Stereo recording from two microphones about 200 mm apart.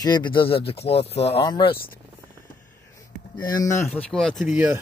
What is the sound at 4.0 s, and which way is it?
Speech, 5° left (ahead or behind).